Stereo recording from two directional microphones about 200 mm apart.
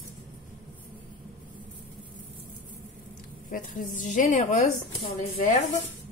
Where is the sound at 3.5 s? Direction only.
40° left (ahead or behind).